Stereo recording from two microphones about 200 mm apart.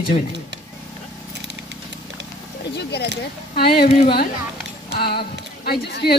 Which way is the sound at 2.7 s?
55° left (ahead or behind).